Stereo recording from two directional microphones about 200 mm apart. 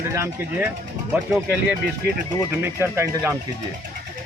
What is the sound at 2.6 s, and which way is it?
Speech, 10° right (ahead or behind).